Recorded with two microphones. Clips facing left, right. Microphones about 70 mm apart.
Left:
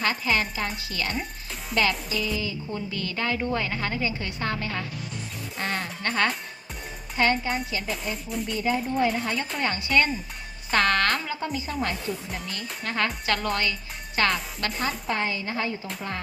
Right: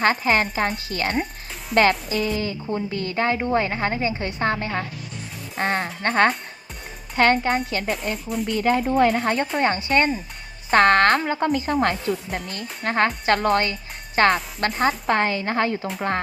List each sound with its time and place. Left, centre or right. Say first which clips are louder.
0.0 s a woman's voice: right 6 dB; right
7.2 s speech: right 5 dB; right
9.6 s a woman's voice: right 2 dB; right
12.8 s a woman's voice: right 7 dB; right